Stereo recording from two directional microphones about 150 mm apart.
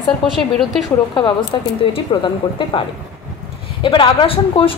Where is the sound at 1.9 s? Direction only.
30° left (ahead or behind).